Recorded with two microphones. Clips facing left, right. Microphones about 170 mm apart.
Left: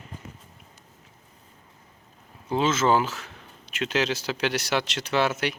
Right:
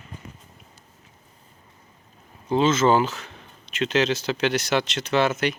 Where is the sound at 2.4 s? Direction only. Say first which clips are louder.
Right 4 dB; 5° left (ahead or behind).